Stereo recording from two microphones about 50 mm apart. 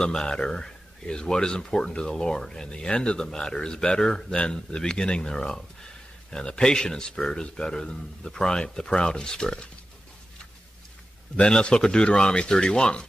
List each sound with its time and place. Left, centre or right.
0.0 s speech: centre
11.3 s speech: centre